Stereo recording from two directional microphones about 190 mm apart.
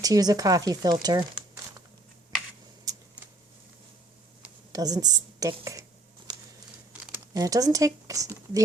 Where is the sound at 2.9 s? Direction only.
20° right (ahead or behind).